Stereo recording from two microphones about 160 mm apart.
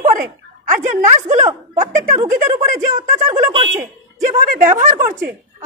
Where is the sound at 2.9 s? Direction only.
20° right (ahead or behind).